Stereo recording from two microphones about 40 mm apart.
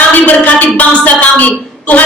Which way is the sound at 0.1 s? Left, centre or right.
Left.